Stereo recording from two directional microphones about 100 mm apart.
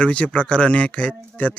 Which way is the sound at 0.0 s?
10° left (ahead or behind).